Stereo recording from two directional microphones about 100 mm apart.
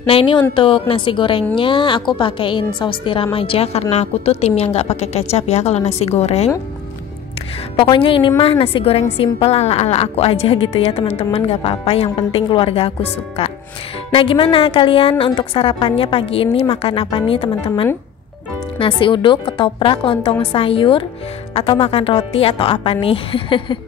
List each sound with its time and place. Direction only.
0.0 s a woman's voice: 65° left (ahead or behind)
3.3 s a woman's voice: 70° left (ahead or behind); by 6.5 s 90° left
7.7 s a woman's voice: 55° left (ahead or behind); by 12.4 s 75° left (ahead or behind)
12.4 s a woman's voice: 65° left (ahead or behind)
14.1 s a woman's voice: 60° left (ahead or behind)
18.8 s a woman's voice: 55° left (ahead or behind)